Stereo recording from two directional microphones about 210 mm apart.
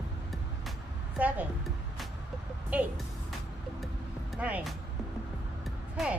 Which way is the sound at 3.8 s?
5° right (ahead or behind).